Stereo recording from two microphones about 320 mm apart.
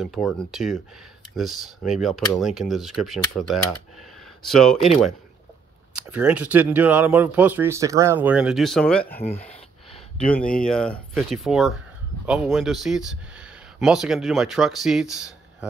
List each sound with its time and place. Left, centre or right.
0.0 s speech: centre
5.9 s speech: centre
9.2 s speech: centre
10.6 s speech: centre